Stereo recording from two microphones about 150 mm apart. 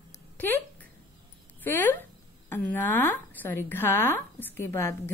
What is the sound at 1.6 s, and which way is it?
A woman's voice, 15° left (ahead or behind).